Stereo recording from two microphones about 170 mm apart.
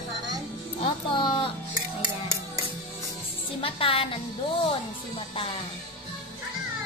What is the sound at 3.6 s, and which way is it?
Music, 30° left (ahead or behind).